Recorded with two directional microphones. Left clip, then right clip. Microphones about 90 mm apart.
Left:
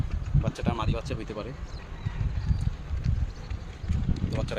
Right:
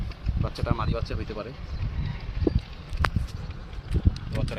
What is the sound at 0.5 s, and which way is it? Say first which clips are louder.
Speech: right 3 dB; 35° left (ahead or behind).